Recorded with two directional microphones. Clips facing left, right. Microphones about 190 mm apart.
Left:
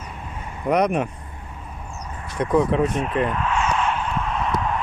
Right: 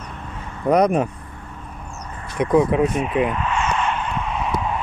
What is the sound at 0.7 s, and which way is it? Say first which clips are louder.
Speech: right 3 dB; 35° right (ahead or behind).